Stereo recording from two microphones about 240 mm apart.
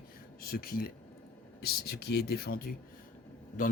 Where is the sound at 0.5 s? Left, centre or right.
Left.